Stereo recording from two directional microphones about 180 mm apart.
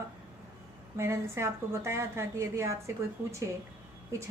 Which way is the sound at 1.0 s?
15° right (ahead or behind).